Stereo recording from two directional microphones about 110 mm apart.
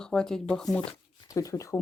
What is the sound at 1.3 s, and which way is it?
Speech, 30° left (ahead or behind).